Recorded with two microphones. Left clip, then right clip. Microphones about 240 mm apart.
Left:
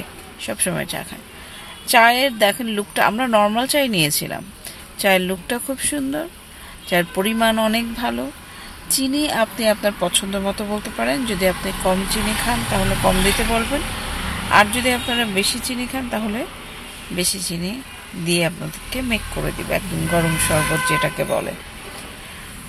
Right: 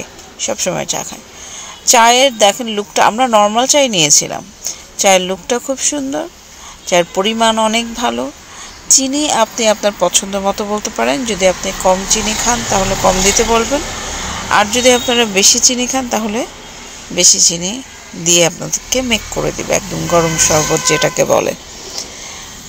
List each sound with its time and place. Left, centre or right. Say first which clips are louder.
0.4 s speech: right 7 dB; centre
14.5 s speech: right 5 dB; centre; by 21.5 s right